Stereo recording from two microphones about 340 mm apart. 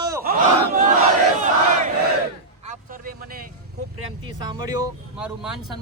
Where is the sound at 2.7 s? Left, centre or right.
Right.